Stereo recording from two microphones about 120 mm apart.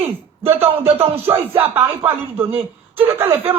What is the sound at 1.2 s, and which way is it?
Speech, 20° right (ahead or behind).